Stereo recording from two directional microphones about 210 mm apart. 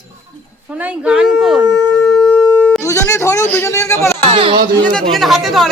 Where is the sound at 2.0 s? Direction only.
5° left (ahead or behind).